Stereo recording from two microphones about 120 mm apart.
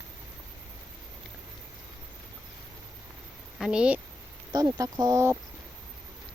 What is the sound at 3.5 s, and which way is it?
Speech, 5° right (ahead or behind).